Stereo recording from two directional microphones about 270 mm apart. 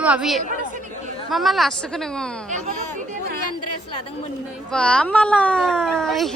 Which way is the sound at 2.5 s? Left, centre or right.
Right.